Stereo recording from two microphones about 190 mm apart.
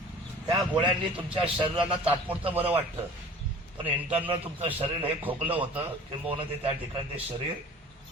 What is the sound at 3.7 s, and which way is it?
Speech, 30° right (ahead or behind).